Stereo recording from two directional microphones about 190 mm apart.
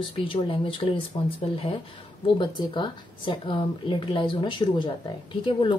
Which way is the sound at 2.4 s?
25° left (ahead or behind).